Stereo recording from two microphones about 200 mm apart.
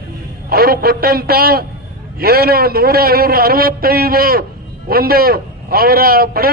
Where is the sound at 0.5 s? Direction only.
50° right (ahead or behind).